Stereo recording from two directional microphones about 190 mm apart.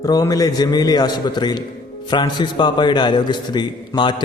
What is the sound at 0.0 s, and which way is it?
A man's voice, 20° left (ahead or behind).